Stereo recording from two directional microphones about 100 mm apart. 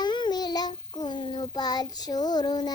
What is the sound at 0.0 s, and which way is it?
Child singing, 45° left (ahead or behind).